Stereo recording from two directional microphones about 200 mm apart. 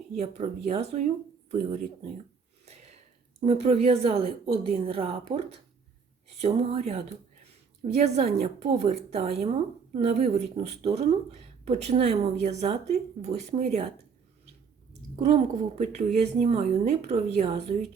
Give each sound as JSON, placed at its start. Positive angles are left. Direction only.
{"t": 0.2, "sound": "speech", "side_deg": -30}
{"t": 3.4, "sound": "speech", "side_deg": -30}
{"t": 15.1, "sound": "speech", "side_deg": -35}